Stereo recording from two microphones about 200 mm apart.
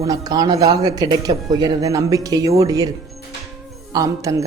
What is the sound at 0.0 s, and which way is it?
Speech, 20° right (ahead or behind).